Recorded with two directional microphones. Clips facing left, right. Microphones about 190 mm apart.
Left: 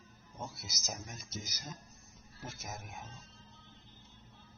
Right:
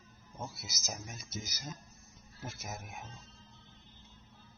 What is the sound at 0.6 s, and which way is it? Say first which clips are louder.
Speech: even; 5° right (ahead or behind).